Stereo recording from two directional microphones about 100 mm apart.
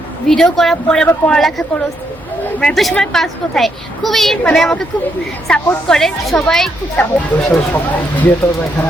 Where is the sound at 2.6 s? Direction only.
5° left (ahead or behind).